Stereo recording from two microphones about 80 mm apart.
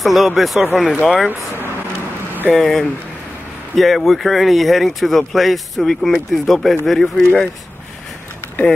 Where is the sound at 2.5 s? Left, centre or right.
Centre.